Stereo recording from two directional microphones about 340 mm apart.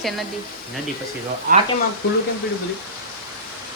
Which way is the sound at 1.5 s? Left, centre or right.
Right.